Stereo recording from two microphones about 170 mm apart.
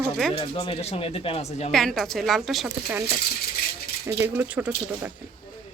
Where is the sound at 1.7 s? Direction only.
Centre (ahead or behind).